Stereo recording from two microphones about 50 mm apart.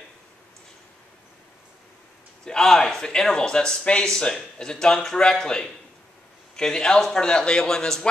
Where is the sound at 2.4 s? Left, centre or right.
Centre.